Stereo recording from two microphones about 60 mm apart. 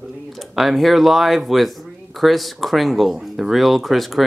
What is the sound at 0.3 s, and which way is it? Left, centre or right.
Speech, centre.